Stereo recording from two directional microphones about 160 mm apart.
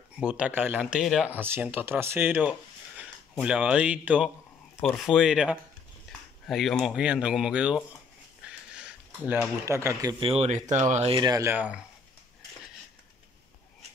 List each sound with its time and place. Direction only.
0.2 s speech: 5° right (ahead or behind)
1.3 s speech: 10° right (ahead or behind)
4.7 s speech: 5° left (ahead or behind)
6.1 s a sound: centre (ahead or behind)
6.4 s speech: centre (ahead or behind)
8.5 s a sound: 5° right (ahead or behind)
9.7 s speech: 20° right (ahead or behind)
10.2 s speech: 40° right (ahead or behind)
11.1 s speech: 25° right (ahead or behind)
11.5 s speech: 10° right (ahead or behind)